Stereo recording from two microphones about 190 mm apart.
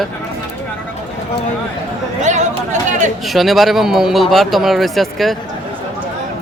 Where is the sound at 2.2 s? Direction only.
40° right (ahead or behind).